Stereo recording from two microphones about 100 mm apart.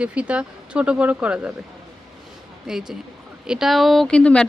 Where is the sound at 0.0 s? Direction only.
10° right (ahead or behind).